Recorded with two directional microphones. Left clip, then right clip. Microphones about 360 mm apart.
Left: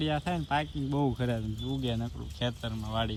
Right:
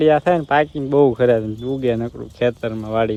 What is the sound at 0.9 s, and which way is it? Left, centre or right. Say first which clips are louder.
Speech: right 19 dB; right.